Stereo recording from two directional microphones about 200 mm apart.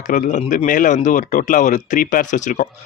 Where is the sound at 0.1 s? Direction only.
40° left (ahead or behind).